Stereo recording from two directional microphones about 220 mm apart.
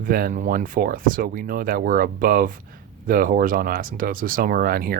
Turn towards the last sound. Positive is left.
turn(degrees=-40)  # may be behind; listen again after turning